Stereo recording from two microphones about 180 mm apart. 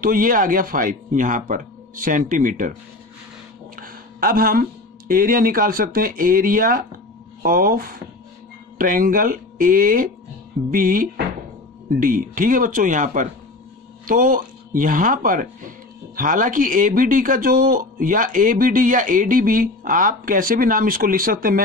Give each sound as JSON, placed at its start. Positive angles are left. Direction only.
{"t": 0.0, "sound": "speech", "side_deg": -50}
{"t": 3.7, "sound": "speech", "side_deg": -55}